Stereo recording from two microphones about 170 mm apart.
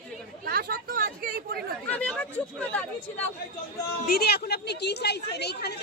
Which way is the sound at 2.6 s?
10° left (ahead or behind).